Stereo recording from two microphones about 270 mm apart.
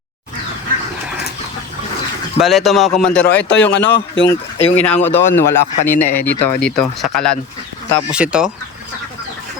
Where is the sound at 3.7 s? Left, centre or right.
Left.